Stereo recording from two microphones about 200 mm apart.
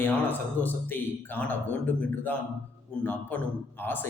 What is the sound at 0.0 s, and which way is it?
A man's voice, 10° left (ahead or behind).